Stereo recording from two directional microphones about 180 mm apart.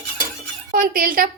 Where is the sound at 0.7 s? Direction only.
50° right (ahead or behind).